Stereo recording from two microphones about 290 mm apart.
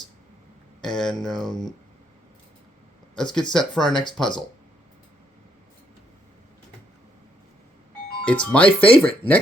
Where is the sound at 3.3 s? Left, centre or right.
Centre.